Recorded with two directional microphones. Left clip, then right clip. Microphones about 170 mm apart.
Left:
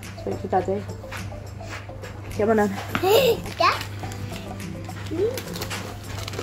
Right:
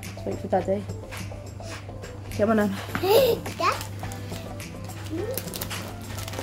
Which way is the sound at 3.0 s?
30° right (ahead or behind).